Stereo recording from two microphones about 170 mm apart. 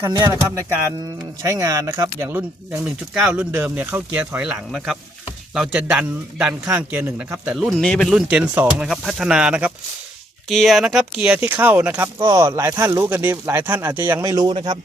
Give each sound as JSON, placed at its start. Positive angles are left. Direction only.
{"t": 0.0, "sound": "a man's voice", "side_deg": -20}